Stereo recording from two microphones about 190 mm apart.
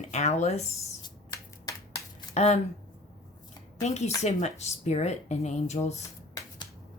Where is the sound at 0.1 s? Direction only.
35° left (ahead or behind).